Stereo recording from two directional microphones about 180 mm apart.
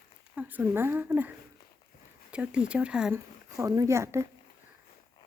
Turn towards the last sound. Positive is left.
turn(degrees=-15)  # may be behind; listen again after turning